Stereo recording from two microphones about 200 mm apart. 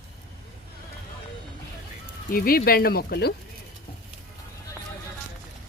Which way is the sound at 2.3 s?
45° left (ahead or behind).